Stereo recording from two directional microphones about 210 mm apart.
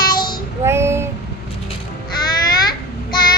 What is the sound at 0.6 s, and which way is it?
Speech, 10° right (ahead or behind).